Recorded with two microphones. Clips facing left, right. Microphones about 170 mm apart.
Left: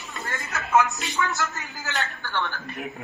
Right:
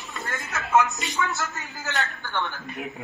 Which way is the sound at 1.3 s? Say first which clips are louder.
Left 2 dB; centre (ahead or behind).